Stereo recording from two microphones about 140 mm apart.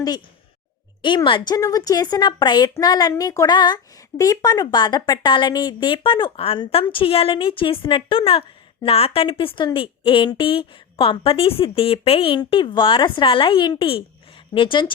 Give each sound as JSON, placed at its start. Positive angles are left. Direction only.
{"t": 1.0, "sound": "speech", "side_deg": 35}